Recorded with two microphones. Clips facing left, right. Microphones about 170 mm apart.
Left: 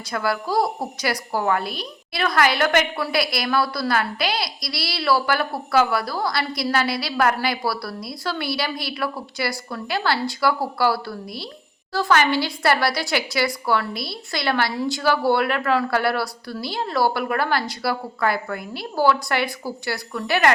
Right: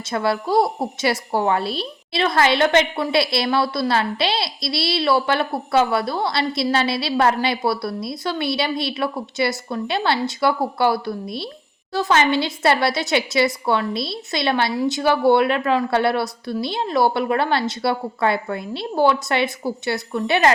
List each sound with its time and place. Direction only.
0.1 s a woman's voice: 25° right (ahead or behind)